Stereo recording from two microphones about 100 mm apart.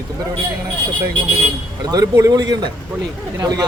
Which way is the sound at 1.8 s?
40° right (ahead or behind).